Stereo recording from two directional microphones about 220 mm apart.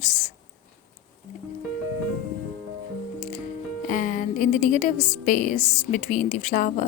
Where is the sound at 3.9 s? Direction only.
35° left (ahead or behind).